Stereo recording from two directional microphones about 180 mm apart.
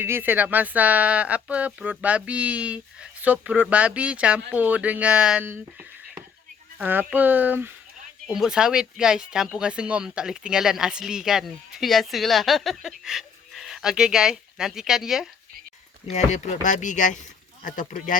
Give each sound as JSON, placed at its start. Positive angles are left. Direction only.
{"t": 0.0, "sound": "speech", "side_deg": -10}
{"t": 6.7, "sound": "speech", "side_deg": -10}
{"t": 16.1, "sound": "speech", "side_deg": 40}